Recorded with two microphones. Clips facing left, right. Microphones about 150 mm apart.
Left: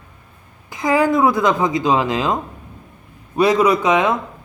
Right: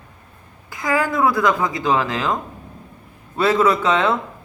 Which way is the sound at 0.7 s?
20° left (ahead or behind).